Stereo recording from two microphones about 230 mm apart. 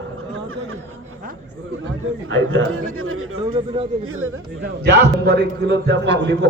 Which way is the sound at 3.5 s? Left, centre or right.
Right.